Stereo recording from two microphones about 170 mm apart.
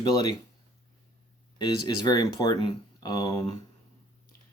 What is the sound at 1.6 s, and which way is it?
Speech, 25° left (ahead or behind).